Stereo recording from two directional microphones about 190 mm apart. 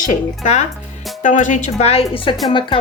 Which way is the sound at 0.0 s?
35° left (ahead or behind).